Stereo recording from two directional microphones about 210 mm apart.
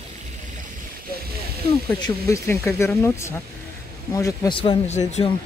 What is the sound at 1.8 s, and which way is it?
Speech, 15° left (ahead or behind).